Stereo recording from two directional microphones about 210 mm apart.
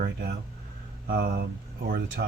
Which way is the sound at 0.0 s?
50° right (ahead or behind).